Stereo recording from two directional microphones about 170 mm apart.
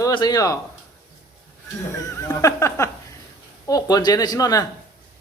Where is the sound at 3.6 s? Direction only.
20° left (ahead or behind).